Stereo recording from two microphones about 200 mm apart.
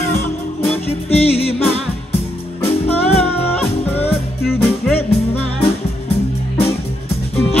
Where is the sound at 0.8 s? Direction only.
30° left (ahead or behind).